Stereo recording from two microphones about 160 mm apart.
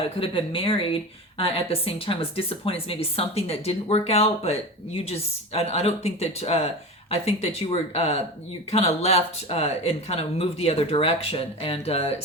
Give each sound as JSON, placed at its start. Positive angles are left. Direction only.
{"t": 0.2, "sound": "speech", "side_deg": 35}